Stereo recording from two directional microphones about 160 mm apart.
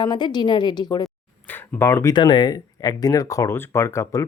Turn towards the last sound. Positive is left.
turn(degrees=20)  # may be behind; listen again after turning